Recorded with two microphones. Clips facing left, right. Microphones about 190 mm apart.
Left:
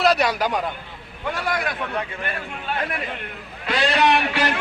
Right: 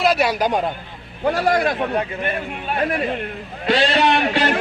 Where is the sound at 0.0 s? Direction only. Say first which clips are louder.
Right 2 dB; 5° right (ahead or behind).